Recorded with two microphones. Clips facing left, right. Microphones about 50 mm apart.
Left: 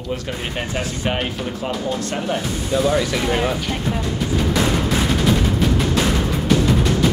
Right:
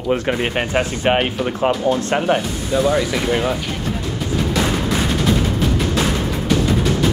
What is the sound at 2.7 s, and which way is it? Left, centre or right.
Speech, centre.